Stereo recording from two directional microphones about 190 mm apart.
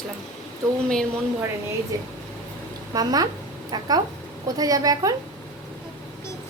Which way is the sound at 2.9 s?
20° right (ahead or behind).